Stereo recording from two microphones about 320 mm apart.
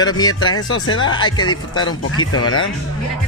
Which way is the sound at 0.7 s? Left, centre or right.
Left.